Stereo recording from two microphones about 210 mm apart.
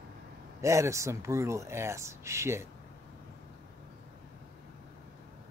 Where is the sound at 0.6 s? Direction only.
15° right (ahead or behind).